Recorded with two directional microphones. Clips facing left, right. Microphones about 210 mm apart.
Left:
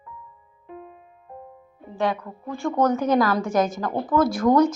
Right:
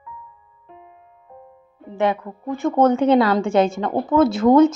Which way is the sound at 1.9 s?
20° right (ahead or behind).